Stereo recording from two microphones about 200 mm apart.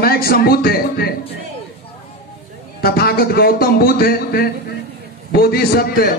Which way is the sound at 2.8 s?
50° left (ahead or behind).